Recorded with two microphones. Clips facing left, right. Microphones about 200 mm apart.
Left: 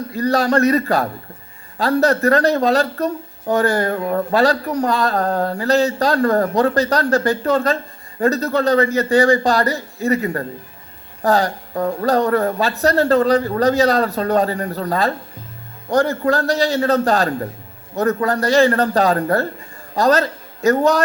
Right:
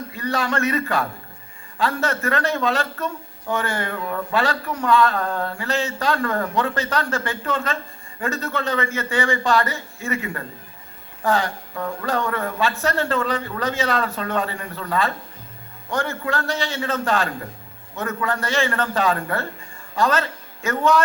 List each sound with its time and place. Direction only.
0.1 s a man's voice: 40° left (ahead or behind)